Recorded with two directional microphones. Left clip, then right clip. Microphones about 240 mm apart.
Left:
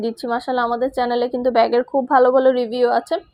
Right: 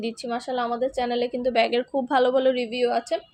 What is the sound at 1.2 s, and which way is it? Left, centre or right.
A woman's voice, centre.